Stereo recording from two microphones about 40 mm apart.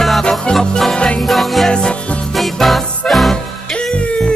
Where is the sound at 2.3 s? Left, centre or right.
Centre.